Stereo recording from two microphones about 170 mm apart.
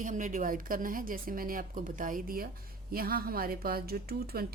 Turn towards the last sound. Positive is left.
turn(degrees=-65)  # may be behind; listen again after turning